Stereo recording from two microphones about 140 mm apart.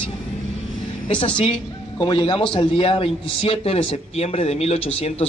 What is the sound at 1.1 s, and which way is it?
A man's voice, 35° left (ahead or behind).